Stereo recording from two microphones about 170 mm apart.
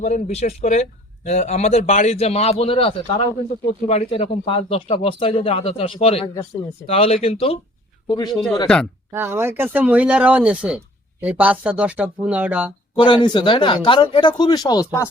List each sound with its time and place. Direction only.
0.0 s a man's voice: 40° left (ahead or behind)
8.0 s speech: 25° left (ahead or behind)
9.1 s speech: 15° right (ahead or behind)
13.0 s speech: 30° left (ahead or behind)